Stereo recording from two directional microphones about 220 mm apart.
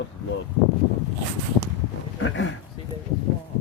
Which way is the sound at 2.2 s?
60° left (ahead or behind).